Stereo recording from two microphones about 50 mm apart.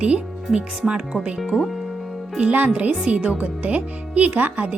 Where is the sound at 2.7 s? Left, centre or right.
Right.